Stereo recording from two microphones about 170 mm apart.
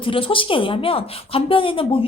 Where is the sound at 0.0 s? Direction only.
30° left (ahead or behind).